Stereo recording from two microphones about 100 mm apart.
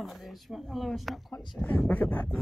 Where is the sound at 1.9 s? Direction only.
15° left (ahead or behind).